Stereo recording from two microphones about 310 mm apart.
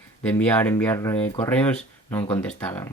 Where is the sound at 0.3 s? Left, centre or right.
Centre.